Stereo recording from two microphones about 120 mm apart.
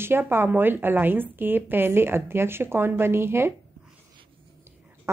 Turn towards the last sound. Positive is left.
turn(degrees=-20)  # may be behind; listen again after turning